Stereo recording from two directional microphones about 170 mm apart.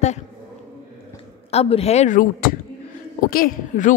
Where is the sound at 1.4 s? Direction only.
35° left (ahead or behind).